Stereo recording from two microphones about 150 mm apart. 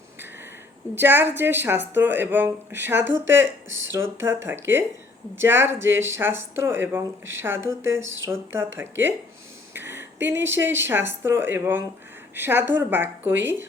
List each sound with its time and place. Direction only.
0.9 s speech: 15° right (ahead or behind)